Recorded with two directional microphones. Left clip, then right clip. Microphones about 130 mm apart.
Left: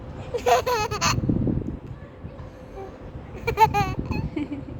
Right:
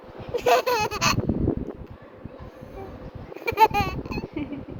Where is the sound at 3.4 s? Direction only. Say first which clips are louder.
Even; 10° left (ahead or behind).